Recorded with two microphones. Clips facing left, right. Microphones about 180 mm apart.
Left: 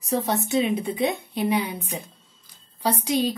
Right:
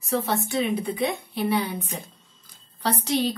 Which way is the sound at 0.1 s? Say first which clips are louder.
Left 2 dB; 20° left (ahead or behind).